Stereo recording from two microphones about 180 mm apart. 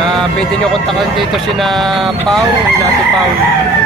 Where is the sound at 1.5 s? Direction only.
Centre (ahead or behind).